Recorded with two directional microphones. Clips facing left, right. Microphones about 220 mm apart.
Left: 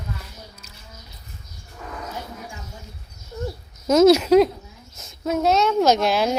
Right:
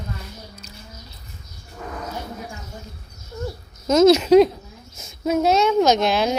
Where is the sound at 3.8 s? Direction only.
10° left (ahead or behind).